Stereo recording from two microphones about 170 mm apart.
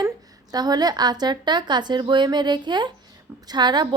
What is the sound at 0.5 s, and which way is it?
A woman's voice, 25° right (ahead or behind).